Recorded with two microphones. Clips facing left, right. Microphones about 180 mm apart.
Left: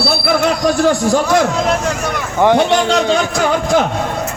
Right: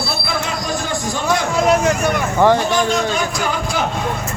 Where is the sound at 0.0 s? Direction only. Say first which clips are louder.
Left 8 dB; 75° left (ahead or behind).